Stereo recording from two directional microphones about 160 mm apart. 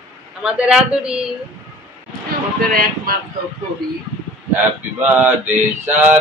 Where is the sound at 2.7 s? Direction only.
65° right (ahead or behind).